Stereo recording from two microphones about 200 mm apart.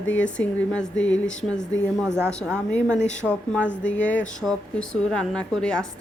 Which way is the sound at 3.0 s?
35° left (ahead or behind).